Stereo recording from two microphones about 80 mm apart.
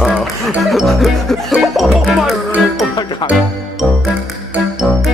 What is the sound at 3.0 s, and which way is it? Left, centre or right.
Speech, left.